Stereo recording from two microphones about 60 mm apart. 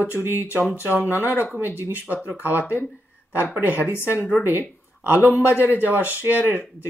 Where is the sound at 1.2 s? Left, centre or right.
Left.